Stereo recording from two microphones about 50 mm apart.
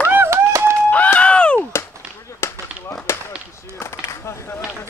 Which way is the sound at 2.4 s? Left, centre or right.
Left.